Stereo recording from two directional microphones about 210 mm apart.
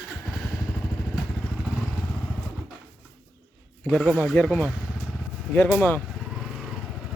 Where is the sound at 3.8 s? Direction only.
Centre (ahead or behind).